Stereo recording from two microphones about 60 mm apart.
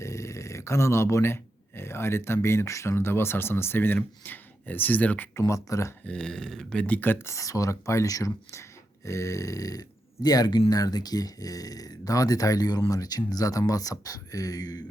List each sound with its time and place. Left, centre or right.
0.0 s a sound: left
2.9 s speech: left
5.4 s speech: left
6.1 s speech: centre
6.8 s speech: left
7.3 s speech: left
9.0 s speech: left
10.2 s speech: left